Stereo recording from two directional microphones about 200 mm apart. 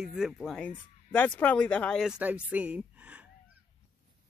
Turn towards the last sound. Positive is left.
turn(degrees=-5)  # may be behind; listen again after turning